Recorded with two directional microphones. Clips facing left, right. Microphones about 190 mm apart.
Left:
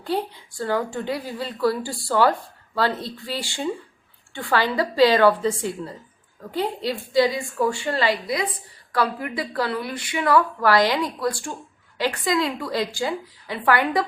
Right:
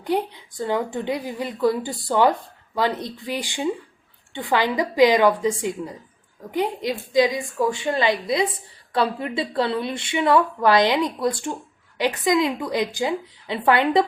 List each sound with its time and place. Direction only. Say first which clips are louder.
0.0 s a woman's voice: right 2 dB; 15° right (ahead or behind)